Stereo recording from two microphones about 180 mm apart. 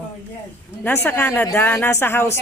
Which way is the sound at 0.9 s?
10° left (ahead or behind).